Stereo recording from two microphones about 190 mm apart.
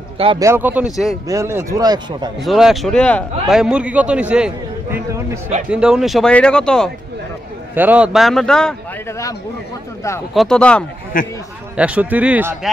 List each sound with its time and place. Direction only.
0.4 s speech: 10° right (ahead or behind)
2.4 s a man's voice: centre (ahead or behind)
7.7 s a man's voice: 10° right (ahead or behind)
10.3 s a man's voice: centre (ahead or behind)
11.1 s a man's voice: 45° left (ahead or behind)
11.7 s speech: 5° right (ahead or behind)